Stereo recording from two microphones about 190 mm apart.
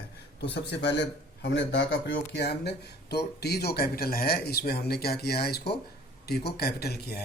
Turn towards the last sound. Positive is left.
turn(degrees=55)  # may be behind; listen again after turning